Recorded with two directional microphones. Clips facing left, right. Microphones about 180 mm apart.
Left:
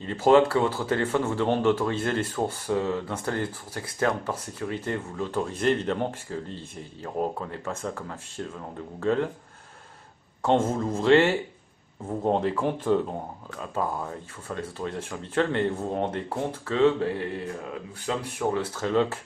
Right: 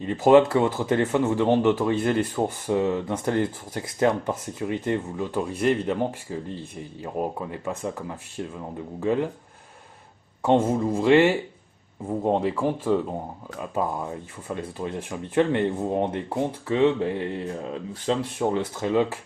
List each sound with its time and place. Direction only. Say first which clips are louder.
0.0 s speech: right 3 dB; 15° right (ahead or behind)
10.4 s speech: right 3 dB; 15° right (ahead or behind)
18.6 s speech: even; 15° right (ahead or behind)